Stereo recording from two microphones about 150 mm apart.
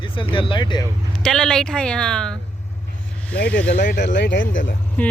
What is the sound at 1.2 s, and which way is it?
Speech, 5° left (ahead or behind).